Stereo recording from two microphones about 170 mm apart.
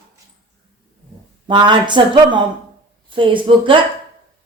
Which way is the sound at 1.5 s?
25° right (ahead or behind).